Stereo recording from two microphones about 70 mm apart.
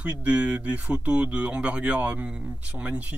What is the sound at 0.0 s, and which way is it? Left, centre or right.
Speech, centre.